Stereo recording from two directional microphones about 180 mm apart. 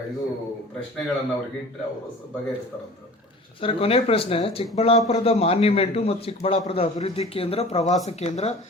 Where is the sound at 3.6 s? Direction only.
30° left (ahead or behind).